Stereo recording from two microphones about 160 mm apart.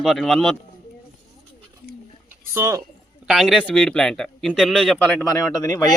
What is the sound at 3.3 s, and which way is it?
A man's voice, centre (ahead or behind).